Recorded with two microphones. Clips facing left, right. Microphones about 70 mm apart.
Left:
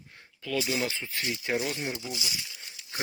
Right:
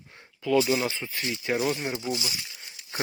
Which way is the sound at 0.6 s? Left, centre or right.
Right.